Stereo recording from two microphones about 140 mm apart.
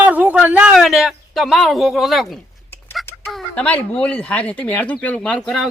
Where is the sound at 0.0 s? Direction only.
10° right (ahead or behind).